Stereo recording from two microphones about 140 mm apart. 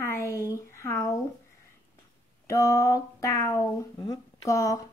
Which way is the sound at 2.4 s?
20° left (ahead or behind).